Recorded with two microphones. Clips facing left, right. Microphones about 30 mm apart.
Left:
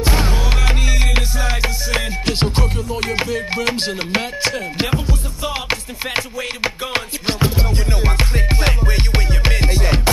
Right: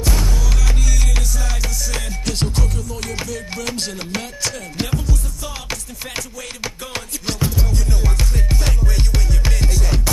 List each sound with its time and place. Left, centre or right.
0.0 s music: left